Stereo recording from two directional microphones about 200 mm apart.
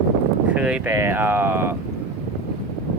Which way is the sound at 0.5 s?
5° right (ahead or behind).